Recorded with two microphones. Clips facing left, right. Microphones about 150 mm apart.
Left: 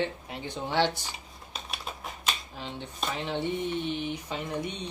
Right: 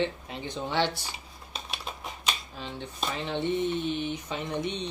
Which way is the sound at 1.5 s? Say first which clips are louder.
Right 1 dB; centre (ahead or behind).